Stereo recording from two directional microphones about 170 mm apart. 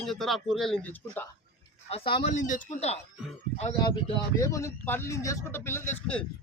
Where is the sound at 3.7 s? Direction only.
25° left (ahead or behind).